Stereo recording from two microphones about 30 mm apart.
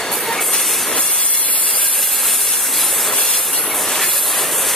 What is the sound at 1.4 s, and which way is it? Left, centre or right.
Steam, left.